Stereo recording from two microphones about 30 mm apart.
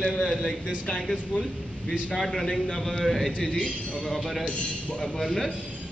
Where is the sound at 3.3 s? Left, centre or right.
Left.